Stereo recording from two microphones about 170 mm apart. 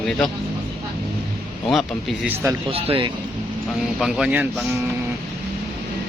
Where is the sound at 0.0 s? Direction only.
Centre (ahead or behind).